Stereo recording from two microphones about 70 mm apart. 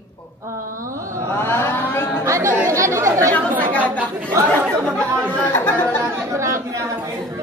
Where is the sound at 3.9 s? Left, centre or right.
Right.